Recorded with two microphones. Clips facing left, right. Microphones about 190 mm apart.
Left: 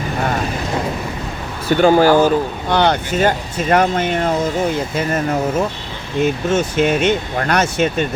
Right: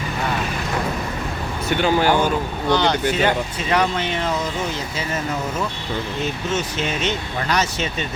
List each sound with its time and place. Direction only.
1.6 s speech: 40° left (ahead or behind)
2.7 s speech: 55° left (ahead or behind)